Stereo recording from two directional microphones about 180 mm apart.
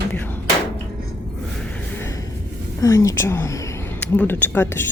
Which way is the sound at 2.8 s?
15° left (ahead or behind).